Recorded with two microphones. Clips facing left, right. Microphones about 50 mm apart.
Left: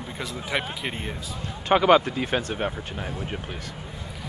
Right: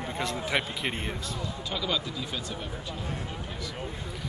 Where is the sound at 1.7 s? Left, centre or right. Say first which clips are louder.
Left 15 dB; left.